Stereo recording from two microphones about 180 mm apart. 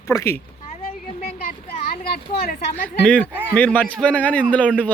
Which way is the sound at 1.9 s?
60° left (ahead or behind).